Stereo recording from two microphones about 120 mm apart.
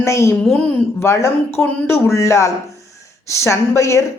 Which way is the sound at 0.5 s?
20° left (ahead or behind).